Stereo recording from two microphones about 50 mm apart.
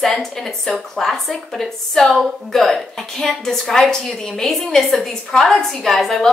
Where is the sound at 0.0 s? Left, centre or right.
Centre.